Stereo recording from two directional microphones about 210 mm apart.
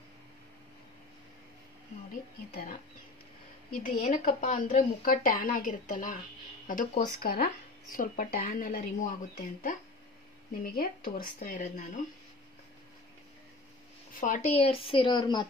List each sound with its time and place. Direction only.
2.5 s speech: 40° left (ahead or behind)
3.8 s speech: 40° left (ahead or behind)
14.2 s speech: 40° left (ahead or behind)
14.6 s a woman's voice: 25° left (ahead or behind)